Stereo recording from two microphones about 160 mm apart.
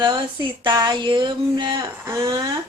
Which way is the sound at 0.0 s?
30° right (ahead or behind).